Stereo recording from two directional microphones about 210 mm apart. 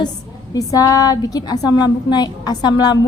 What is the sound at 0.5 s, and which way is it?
A woman's voice, 15° left (ahead or behind).